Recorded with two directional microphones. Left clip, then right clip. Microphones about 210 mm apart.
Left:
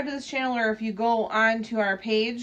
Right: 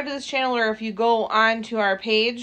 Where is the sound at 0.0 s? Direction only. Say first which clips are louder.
Right 4 dB; 20° right (ahead or behind).